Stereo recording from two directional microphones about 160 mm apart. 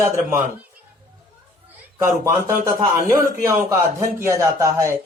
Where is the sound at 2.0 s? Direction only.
15° right (ahead or behind).